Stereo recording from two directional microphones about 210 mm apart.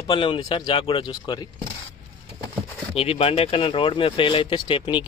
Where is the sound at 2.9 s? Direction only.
25° left (ahead or behind).